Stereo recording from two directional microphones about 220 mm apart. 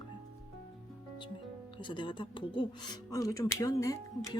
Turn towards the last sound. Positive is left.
turn(degrees=15)  # may be behind; listen again after turning